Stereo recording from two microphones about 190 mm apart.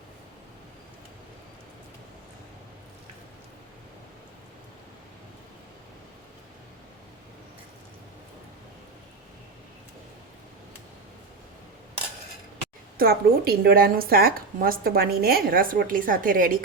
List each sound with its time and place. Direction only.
13.0 s a woman's voice: 55° right (ahead or behind)